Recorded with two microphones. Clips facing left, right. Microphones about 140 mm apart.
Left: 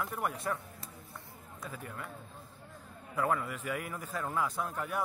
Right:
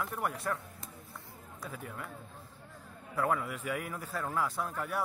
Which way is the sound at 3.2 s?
10° right (ahead or behind).